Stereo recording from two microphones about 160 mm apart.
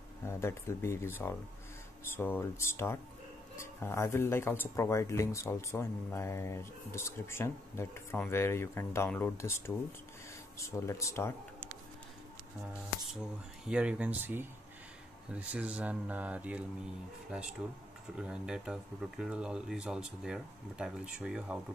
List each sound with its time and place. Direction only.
0.3 s speech: 15° left (ahead or behind)
10.9 s speech: 20° left (ahead or behind)
13.7 s speech: 5° right (ahead or behind)